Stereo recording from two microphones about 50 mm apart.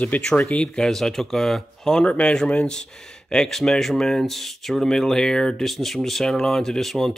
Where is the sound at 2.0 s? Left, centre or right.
Left; by 7.1 s centre.